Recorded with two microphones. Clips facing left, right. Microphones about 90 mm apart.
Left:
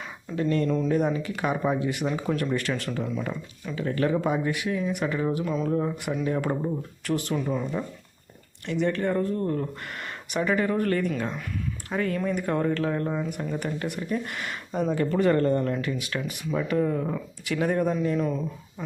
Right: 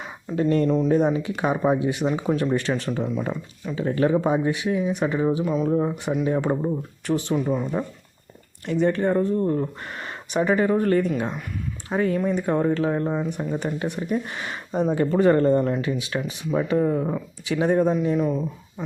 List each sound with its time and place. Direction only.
0.3 s speech: 30° right (ahead or behind); by 7.7 s 15° right (ahead or behind)
8.6 s speech: 35° right (ahead or behind)
18.2 s speech: 10° right (ahead or behind)